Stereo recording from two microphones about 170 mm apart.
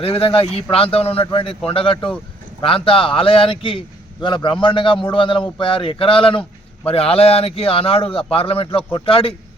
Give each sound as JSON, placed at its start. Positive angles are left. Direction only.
{"t": 0.0, "sound": "a man's voice", "side_deg": 30}